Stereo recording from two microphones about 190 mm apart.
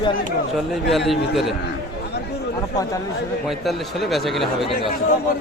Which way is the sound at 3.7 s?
Centre (ahead or behind).